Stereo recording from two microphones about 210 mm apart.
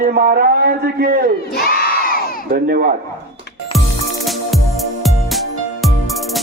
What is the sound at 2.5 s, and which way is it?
Speech, 45° right (ahead or behind).